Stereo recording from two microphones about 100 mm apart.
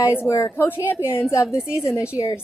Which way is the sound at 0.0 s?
25° left (ahead or behind).